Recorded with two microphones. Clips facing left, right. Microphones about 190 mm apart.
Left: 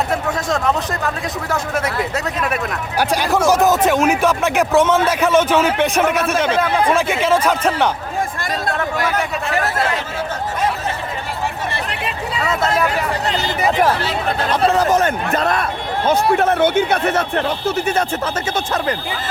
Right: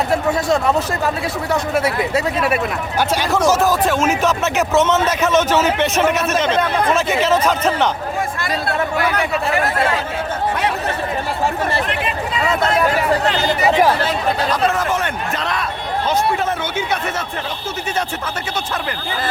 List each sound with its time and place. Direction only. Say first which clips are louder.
0.1 s speech: right 3 dB; 5° right (ahead or behind)
3.0 s a man's voice: left 1 dB; 10° left (ahead or behind)
14.5 s speech: left 3 dB; 35° left (ahead or behind); by 15.6 s 50° left (ahead or behind)
16.0 s speech: left 4 dB; 60° left (ahead or behind)